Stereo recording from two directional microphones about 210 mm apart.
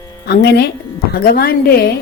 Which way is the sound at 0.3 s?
50° left (ahead or behind).